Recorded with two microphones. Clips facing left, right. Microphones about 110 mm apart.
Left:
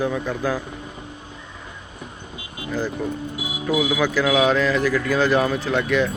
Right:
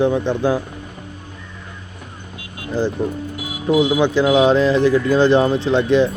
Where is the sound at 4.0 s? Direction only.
30° right (ahead or behind).